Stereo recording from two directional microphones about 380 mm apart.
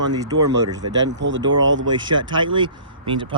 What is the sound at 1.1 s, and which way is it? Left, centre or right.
Speech, right.